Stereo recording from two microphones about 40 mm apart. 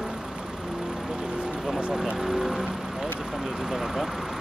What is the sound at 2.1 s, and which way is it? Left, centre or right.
Speech, centre.